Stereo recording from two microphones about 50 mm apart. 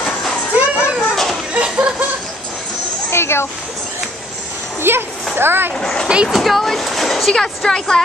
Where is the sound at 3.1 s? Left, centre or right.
Left.